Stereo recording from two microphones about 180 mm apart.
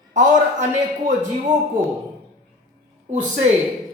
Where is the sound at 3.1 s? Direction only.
45° right (ahead or behind).